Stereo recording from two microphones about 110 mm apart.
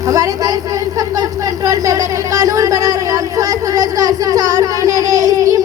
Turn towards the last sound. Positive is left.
turn(degrees=-30)  # may be behind; listen again after turning